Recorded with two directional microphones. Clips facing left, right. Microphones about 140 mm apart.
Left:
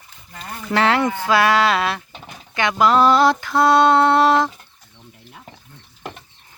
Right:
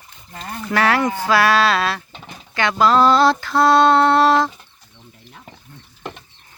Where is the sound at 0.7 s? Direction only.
25° left (ahead or behind).